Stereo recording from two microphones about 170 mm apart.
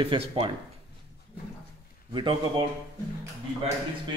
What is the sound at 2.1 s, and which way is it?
Speech, 30° right (ahead or behind).